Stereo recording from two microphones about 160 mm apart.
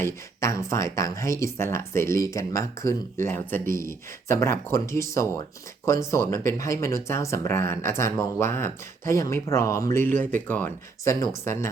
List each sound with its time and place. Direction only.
0.0 s speech: 15° left (ahead or behind)